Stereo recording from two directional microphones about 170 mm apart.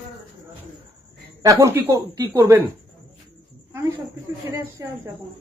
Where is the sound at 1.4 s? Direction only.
20° right (ahead or behind).